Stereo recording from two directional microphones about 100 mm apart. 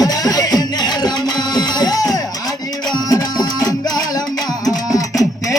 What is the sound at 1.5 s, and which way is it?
Music, 45° left (ahead or behind).